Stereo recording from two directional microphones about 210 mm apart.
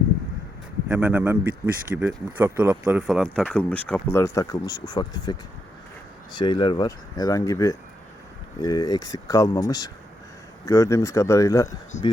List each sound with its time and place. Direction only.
0.9 s speech: 5° right (ahead or behind); by 11.7 s 15° left (ahead or behind)